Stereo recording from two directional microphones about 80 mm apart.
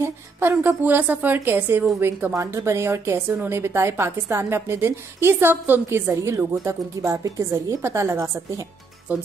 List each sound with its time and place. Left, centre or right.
0.0 s a woman's voice: right
2.3 s a woman's voice: right
9.1 s a woman's voice: right